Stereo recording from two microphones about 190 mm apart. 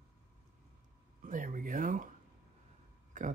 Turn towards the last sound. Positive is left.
turn(degrees=-40)  # may be behind; listen again after turning